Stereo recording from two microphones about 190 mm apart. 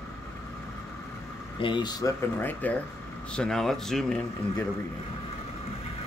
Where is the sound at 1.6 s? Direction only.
25° left (ahead or behind).